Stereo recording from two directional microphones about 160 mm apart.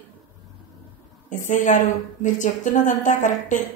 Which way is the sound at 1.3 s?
50° left (ahead or behind).